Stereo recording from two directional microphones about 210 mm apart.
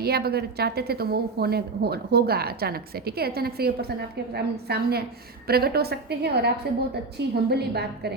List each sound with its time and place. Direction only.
0.0 s a woman's voice: 50° right (ahead or behind)